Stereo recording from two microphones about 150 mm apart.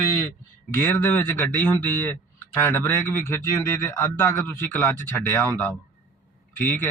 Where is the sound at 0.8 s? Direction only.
15° left (ahead or behind).